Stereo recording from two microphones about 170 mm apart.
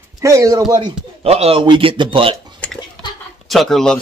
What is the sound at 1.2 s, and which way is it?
Speech, 35° right (ahead or behind).